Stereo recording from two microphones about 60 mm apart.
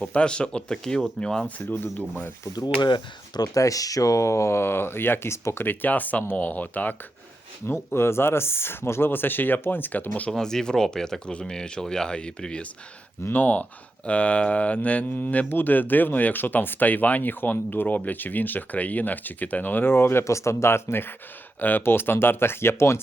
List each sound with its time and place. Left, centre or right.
0.1 s speech: centre
1.5 s speech: left
3.4 s speech: left
5.6 s speech: left
7.9 s speech: left
10.1 s speech: centre
13.3 s speech: left
21.6 s speech: left